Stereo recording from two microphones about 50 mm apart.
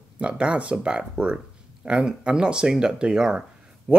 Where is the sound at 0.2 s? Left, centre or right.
Right.